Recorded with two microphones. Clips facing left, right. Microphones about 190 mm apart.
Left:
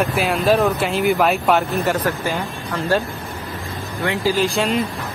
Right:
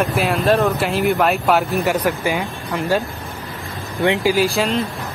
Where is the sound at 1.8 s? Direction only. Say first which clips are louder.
Right 2 dB; 15° right (ahead or behind).